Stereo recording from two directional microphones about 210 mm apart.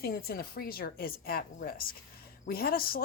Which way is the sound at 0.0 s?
45° left (ahead or behind).